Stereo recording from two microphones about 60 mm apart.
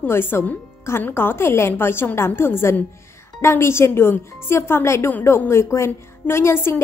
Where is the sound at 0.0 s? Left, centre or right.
Left.